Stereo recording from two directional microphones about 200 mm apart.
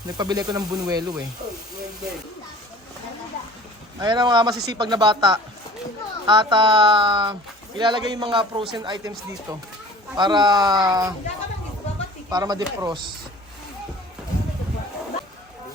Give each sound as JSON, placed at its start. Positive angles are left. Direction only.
{"t": 0.2, "sound": "speech", "side_deg": -20}
{"t": 4.0, "sound": "speech", "side_deg": -20}
{"t": 12.3, "sound": "speech", "side_deg": -20}